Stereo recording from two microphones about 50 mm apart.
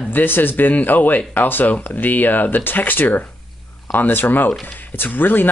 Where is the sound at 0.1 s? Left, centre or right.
Left.